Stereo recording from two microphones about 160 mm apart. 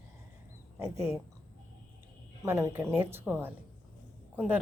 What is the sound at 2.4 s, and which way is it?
Speech, 15° right (ahead or behind).